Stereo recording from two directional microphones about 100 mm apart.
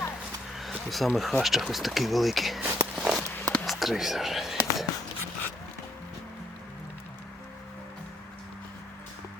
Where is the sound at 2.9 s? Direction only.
10° right (ahead or behind).